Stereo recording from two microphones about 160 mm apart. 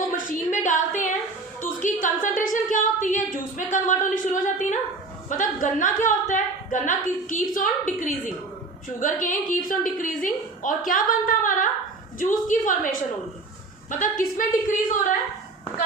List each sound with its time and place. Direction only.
0.1 s a sound: 55° left (ahead or behind)
1.8 s a woman's voice: 55° left (ahead or behind)
14.0 s a woman's voice: 55° left (ahead or behind)